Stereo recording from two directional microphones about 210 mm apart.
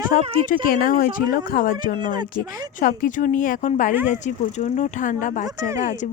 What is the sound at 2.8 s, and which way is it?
Speech, 40° left (ahead or behind).